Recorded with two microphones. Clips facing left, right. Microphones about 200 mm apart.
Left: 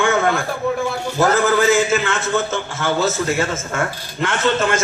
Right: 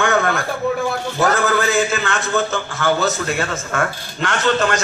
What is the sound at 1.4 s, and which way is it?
Speech, 20° left (ahead or behind).